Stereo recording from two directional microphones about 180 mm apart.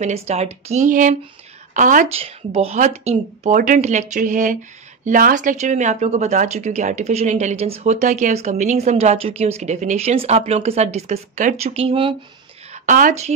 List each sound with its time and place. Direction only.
0.0 s a woman's voice: 35° right (ahead or behind)
2.1 s a woman's voice: 35° right (ahead or behind)
12.7 s speech: 45° right (ahead or behind)